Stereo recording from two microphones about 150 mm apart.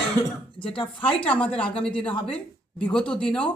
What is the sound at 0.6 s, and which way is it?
Speech, 35° left (ahead or behind).